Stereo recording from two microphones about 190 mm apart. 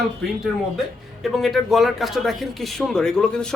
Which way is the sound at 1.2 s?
Centre (ahead or behind).